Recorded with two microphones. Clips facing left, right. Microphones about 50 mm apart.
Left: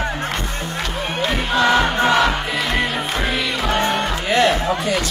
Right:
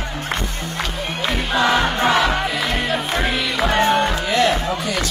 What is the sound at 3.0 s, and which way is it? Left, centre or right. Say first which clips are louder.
Music: even; centre.